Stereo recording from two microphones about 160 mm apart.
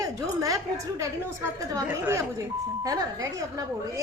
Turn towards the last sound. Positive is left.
turn(degrees=-20)  # may be behind; listen again after turning